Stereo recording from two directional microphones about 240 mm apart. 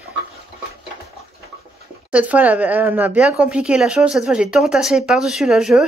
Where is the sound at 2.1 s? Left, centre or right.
Centre.